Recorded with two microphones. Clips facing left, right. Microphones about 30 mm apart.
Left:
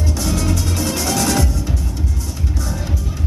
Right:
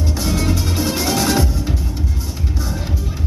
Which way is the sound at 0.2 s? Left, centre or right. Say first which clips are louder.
Right 1 dB; centre.